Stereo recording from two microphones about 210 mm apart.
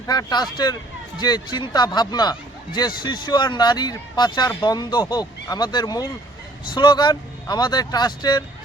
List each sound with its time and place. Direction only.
0.1 s speech: 20° left (ahead or behind)